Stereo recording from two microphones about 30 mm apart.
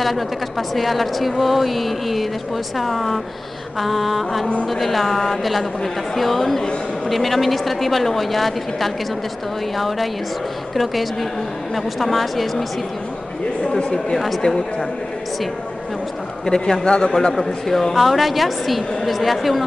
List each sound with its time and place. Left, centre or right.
0.0 s a woman's voice: centre
13.6 s a sound: left
16.4 s a man's voice: left
17.1 s speech: centre
17.9 s a woman's voice: centre